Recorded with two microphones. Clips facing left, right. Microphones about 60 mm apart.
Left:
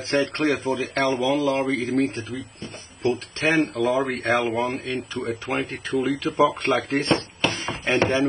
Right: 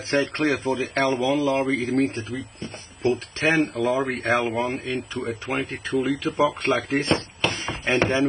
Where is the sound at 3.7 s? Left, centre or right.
Centre.